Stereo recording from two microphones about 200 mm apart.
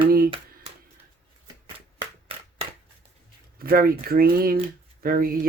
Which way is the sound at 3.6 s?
45° right (ahead or behind).